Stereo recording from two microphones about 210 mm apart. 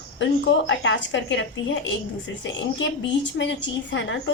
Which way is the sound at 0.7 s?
60° left (ahead or behind).